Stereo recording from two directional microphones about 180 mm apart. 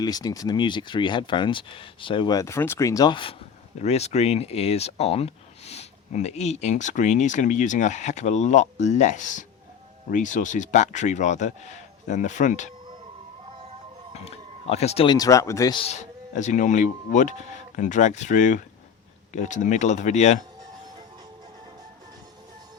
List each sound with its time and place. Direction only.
0.0 s speech: 20° left (ahead or behind)
3.8 s speech: 35° left (ahead or behind)
14.1 s speech: 35° left (ahead or behind); by 15.8 s 20° left (ahead or behind)
15.8 s speech: 40° left (ahead or behind)